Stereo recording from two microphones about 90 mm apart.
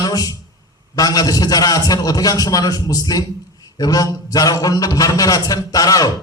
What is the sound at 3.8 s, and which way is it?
A man's voice, 40° left (ahead or behind).